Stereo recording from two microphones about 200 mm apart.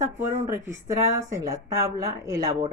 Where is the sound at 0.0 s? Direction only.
15° right (ahead or behind).